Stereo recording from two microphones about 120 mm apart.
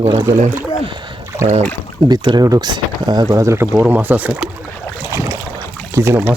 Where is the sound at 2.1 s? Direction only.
35° right (ahead or behind).